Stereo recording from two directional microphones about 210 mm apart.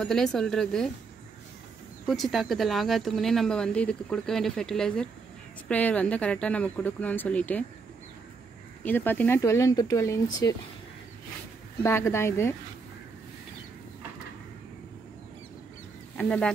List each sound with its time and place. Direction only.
0.0 s speech: centre (ahead or behind)
2.0 s speech: centre (ahead or behind)
8.8 s speech: 10° left (ahead or behind)
11.8 s speech: 10° left (ahead or behind)
16.2 s speech: 5° left (ahead or behind)